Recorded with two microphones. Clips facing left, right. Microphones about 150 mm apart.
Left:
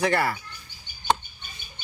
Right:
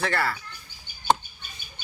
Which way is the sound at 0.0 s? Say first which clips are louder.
Left 3 dB; 15° left (ahead or behind).